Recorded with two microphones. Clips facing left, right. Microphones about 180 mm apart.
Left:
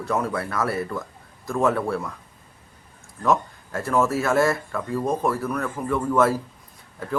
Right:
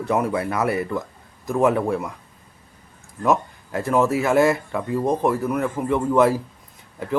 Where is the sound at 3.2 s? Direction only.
15° right (ahead or behind).